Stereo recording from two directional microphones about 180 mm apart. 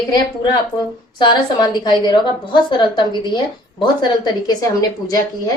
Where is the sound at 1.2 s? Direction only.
25° left (ahead or behind).